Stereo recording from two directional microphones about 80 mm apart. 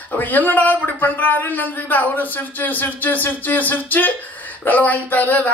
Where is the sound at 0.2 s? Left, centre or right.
Left.